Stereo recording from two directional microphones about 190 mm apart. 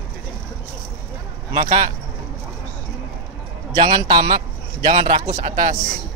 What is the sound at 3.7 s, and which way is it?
A man's voice, 20° right (ahead or behind).